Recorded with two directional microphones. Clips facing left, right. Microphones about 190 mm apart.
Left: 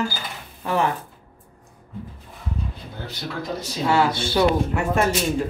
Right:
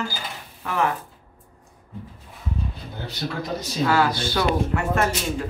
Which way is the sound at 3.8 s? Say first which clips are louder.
Left 1 dB; 25° left (ahead or behind).